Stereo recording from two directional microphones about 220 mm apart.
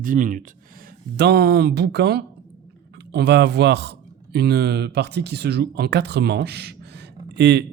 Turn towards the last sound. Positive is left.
turn(degrees=-50)  # may be behind; listen again after turning